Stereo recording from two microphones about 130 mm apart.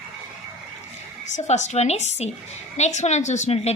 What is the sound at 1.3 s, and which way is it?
A woman's voice, 60° left (ahead or behind).